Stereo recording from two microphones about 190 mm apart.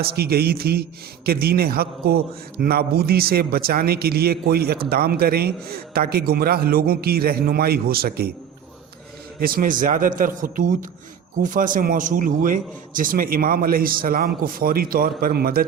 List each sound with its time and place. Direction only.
0.0 s a man's voice: 55° right (ahead or behind)
9.4 s a man's voice: 50° right (ahead or behind)